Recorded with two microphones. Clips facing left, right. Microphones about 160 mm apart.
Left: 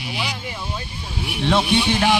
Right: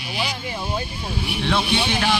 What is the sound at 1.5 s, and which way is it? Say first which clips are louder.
Speech: left 4 dB; 20° left (ahead or behind).